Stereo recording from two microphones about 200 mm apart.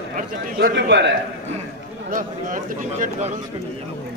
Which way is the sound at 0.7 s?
60° right (ahead or behind).